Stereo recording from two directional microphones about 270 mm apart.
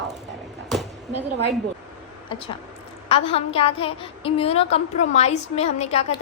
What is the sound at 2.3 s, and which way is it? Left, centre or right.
A woman's voice, centre.